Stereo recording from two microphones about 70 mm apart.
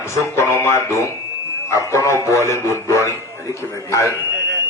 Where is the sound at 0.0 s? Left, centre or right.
Left.